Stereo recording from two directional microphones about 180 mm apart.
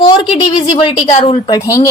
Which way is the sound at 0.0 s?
30° left (ahead or behind).